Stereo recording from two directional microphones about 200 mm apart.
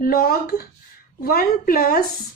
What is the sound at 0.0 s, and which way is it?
A woman's voice, 50° left (ahead or behind).